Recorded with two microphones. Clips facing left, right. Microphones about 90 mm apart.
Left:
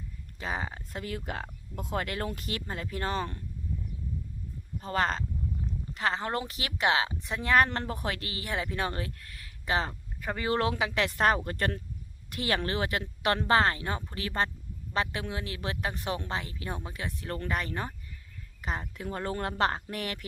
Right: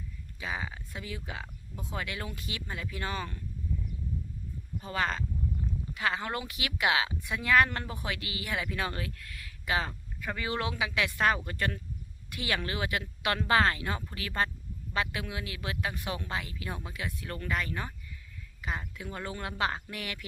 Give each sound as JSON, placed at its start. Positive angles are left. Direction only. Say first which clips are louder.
{"t": 0.3, "sound": "speech", "louder": "left 2 dB", "side_deg": 40}
{"t": 4.8, "sound": "a woman's voice", "louder": "left 3 dB", "side_deg": 40}